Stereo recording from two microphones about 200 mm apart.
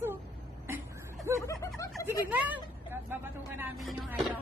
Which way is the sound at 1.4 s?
15° left (ahead or behind).